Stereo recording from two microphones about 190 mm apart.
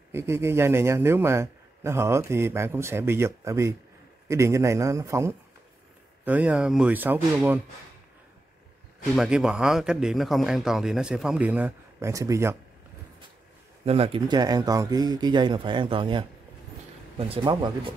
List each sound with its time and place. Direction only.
0.1 s speech: 15° right (ahead or behind)
9.1 s a man's voice: 5° right (ahead or behind)
13.8 s speech: 30° right (ahead or behind)
17.3 s speech: 25° right (ahead or behind)